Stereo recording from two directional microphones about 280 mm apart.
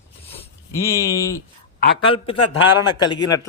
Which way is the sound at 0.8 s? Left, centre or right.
Centre.